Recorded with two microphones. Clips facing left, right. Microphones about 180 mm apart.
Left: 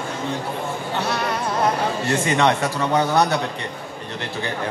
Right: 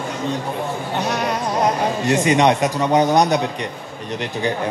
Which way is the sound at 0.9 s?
15° right (ahead or behind).